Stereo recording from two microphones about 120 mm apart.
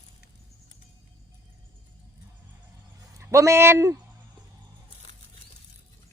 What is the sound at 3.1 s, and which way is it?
Speech, 25° right (ahead or behind).